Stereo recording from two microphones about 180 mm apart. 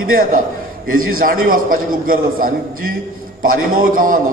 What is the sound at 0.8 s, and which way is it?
A man's voice, 50° right (ahead or behind).